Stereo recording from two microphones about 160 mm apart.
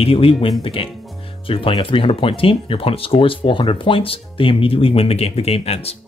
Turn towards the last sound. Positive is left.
turn(degrees=40)  # may be behind; listen again after turning